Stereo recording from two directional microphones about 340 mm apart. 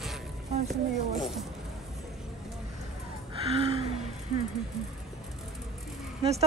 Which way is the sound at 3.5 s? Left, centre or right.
Centre.